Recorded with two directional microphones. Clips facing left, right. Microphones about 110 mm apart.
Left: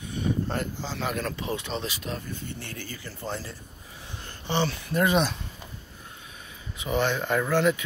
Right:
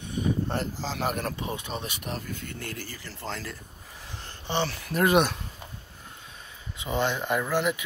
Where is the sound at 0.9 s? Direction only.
50° right (ahead or behind).